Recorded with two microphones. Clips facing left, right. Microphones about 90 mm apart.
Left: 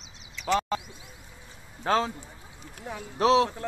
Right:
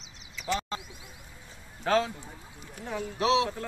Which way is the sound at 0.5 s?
65° left (ahead or behind).